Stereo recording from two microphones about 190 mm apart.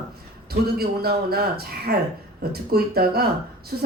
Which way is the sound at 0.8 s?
55° right (ahead or behind).